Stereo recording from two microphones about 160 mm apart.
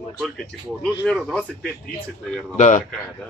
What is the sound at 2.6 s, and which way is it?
Speech, 50° left (ahead or behind).